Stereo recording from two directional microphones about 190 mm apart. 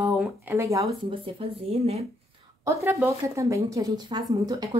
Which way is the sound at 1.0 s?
30° right (ahead or behind).